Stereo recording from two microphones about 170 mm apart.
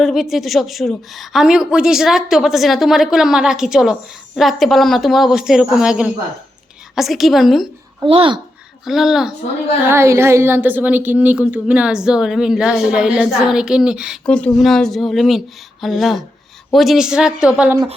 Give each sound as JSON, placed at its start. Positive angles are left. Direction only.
{"t": 0.0, "sound": "a woman's voice", "side_deg": 0}
{"t": 8.0, "sound": "speech", "side_deg": -30}
{"t": 8.8, "sound": "a woman's voice", "side_deg": 0}
{"t": 9.9, "sound": "a woman's voice", "side_deg": -15}
{"t": 14.3, "sound": "a woman's voice", "side_deg": 5}